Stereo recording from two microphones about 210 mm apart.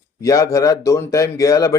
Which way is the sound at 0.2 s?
15° left (ahead or behind).